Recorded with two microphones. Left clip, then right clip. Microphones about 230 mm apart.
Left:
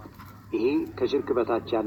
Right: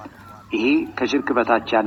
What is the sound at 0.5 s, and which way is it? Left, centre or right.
Speech, right.